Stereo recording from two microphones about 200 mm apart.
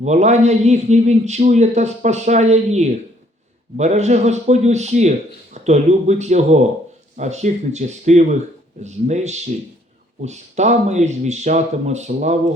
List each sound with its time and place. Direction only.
0.0 s a man's voice: 35° right (ahead or behind)